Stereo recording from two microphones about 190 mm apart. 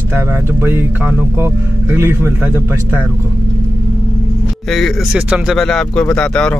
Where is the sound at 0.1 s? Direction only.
10° right (ahead or behind).